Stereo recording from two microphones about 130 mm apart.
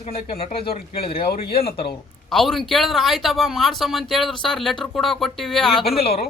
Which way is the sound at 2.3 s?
Centre (ahead or behind).